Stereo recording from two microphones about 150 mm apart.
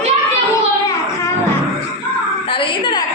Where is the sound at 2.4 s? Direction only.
30° left (ahead or behind).